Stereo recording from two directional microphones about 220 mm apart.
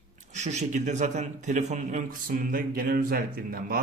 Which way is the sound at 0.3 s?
30° right (ahead or behind).